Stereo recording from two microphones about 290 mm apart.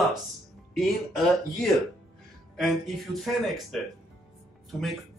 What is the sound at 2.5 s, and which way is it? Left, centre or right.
A man's voice, centre.